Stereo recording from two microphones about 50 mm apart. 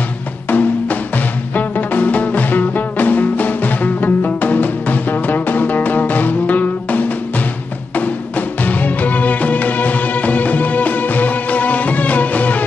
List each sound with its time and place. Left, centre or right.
0.5 s music: left